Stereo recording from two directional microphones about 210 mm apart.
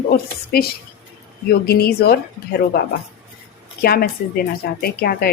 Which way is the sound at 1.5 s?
50° left (ahead or behind).